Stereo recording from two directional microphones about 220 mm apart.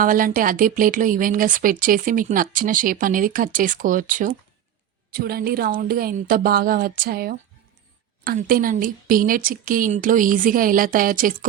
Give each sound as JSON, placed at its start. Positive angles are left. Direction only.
{"t": 0.0, "sound": "speech", "side_deg": -40}